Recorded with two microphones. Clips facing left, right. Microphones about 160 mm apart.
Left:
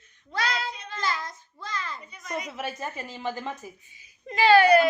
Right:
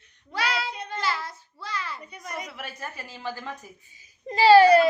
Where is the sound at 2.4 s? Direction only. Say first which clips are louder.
Left 4 dB; 20° left (ahead or behind).